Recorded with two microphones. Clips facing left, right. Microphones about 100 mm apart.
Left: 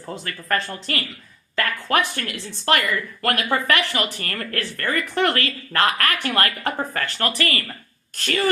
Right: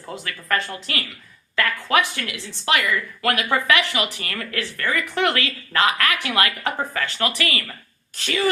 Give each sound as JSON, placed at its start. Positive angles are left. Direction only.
{"t": 0.3, "sound": "speech", "side_deg": 40}
{"t": 8.1, "sound": "speech", "side_deg": 55}